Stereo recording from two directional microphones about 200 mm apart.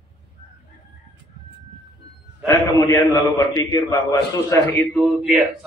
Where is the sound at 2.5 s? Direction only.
15° left (ahead or behind).